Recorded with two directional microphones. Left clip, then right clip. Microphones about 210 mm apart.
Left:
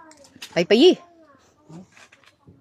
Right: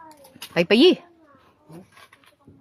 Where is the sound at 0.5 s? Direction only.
5° right (ahead or behind).